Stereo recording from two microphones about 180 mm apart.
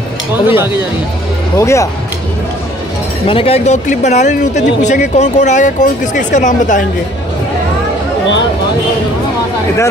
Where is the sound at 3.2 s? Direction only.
30° left (ahead or behind).